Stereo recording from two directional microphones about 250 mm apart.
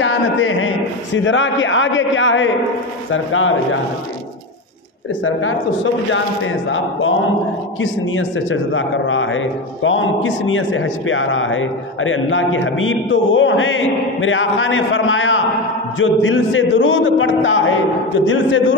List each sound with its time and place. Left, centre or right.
0.0 s a sound: left
1.1 s speech: left
6.1 s speech: left